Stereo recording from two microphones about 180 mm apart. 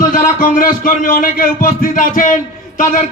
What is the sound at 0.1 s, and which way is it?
A man's voice, 50° left (ahead or behind).